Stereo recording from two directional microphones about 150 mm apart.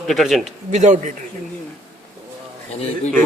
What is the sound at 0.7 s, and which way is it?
Speech, 50° right (ahead or behind).